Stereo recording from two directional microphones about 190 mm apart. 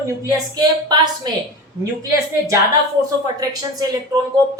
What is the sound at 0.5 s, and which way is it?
A woman's voice, 20° right (ahead or behind).